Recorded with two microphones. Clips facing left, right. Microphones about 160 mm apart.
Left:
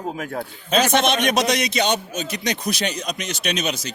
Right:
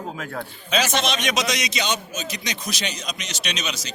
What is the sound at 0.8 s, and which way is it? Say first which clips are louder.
A man's voice: left 6 dB; 55° left (ahead or behind).